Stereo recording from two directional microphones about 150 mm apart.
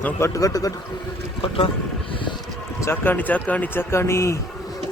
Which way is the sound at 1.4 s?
35° left (ahead or behind).